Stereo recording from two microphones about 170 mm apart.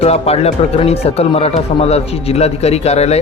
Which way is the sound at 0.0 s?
35° left (ahead or behind).